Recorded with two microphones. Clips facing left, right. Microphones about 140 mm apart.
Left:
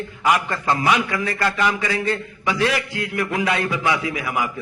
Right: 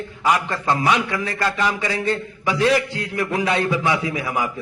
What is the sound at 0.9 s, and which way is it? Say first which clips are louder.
Speech: even; centre (ahead or behind).